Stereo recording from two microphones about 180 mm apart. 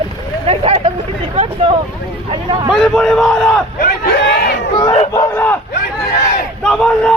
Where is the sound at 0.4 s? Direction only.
35° right (ahead or behind).